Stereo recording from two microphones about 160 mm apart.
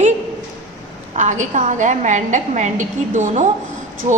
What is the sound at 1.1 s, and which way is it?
A woman's voice, 50° right (ahead or behind).